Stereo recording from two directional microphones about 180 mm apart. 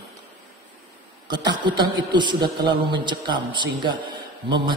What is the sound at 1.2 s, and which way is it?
A man's voice, 25° right (ahead or behind).